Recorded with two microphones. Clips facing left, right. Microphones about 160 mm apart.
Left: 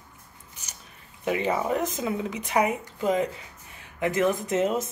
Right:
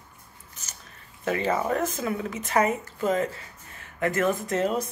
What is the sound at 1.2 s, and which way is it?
Speech, 15° left (ahead or behind).